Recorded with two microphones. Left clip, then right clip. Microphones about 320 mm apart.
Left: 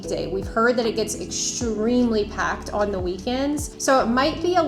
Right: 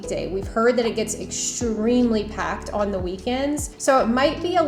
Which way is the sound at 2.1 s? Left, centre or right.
Right.